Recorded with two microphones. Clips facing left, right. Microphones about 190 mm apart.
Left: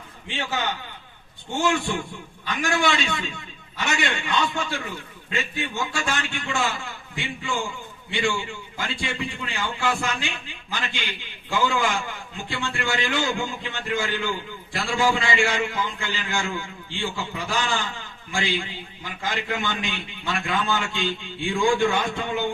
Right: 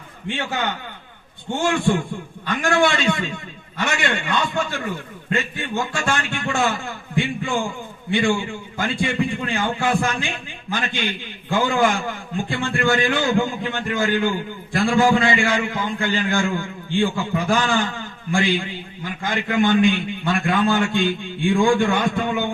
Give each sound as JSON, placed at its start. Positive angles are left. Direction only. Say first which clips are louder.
{"t": 0.3, "sound": "speech", "louder": "right 3 dB", "side_deg": -55}
{"t": 2.5, "sound": "a man's voice", "louder": "right 5 dB", "side_deg": -55}
{"t": 8.8, "sound": "a man's voice", "louder": "right 8 dB", "side_deg": -55}